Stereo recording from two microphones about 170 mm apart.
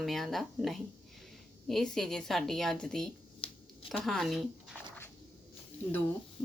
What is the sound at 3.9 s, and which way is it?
Speech, centre (ahead or behind).